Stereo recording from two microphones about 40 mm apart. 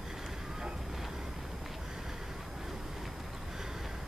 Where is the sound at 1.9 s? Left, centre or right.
Centre.